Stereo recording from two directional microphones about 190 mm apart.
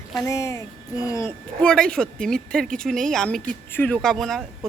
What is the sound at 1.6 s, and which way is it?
A woman's voice, 5° left (ahead or behind).